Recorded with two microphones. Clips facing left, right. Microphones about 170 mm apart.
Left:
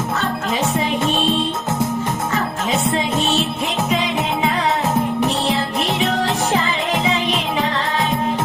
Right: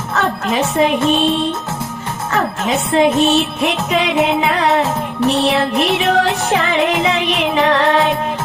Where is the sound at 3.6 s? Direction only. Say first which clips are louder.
Right 4 dB; 70° right (ahead or behind).